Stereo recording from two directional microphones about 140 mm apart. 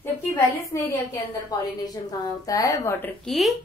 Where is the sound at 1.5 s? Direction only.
30° left (ahead or behind).